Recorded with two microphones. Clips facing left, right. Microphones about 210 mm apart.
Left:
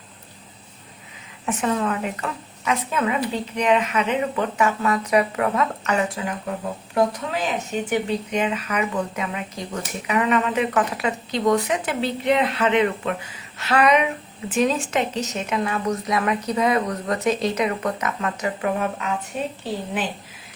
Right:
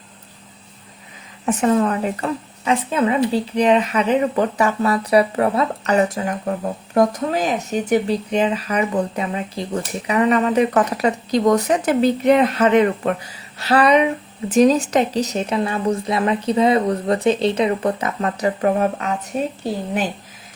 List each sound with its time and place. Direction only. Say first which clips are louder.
1.5 s a woman's voice: right 6 dB; 35° right (ahead or behind)